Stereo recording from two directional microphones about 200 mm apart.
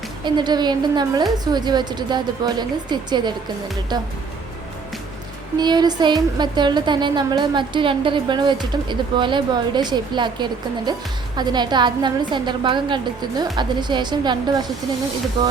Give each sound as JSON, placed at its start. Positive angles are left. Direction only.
{"t": 0.3, "sound": "speech", "side_deg": -20}
{"t": 5.5, "sound": "speech", "side_deg": -20}